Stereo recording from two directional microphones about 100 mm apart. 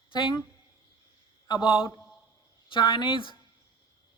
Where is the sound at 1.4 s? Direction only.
50° left (ahead or behind).